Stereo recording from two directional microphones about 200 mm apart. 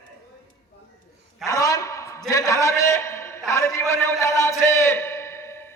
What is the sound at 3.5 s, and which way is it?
A man's voice, 15° left (ahead or behind).